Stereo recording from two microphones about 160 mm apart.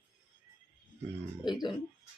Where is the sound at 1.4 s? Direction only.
25° left (ahead or behind).